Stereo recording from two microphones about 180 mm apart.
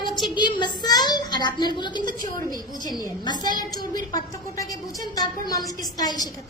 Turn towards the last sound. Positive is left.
turn(degrees=20)  # may be behind; listen again after turning